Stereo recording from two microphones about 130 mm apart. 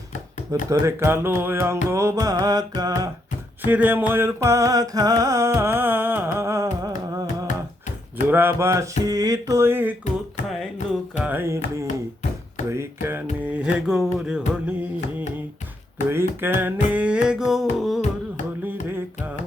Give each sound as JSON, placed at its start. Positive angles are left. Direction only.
{"t": 0.7, "sound": "music", "side_deg": -20}
{"t": 3.6, "sound": "music", "side_deg": -15}
{"t": 8.3, "sound": "music", "side_deg": -15}
{"t": 11.2, "sound": "music", "side_deg": -15}
{"t": 12.6, "sound": "a sound", "side_deg": -20}
{"t": 13.4, "sound": "music", "side_deg": -10}
{"t": 16.0, "sound": "music", "side_deg": -20}
{"t": 18.6, "sound": "carnatic music", "side_deg": -15}